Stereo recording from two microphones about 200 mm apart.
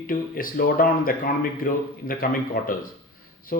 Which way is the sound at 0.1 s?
45° left (ahead or behind).